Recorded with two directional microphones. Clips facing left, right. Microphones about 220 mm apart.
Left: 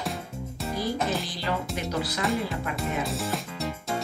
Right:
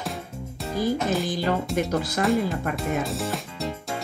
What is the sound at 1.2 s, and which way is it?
Speech, 50° right (ahead or behind).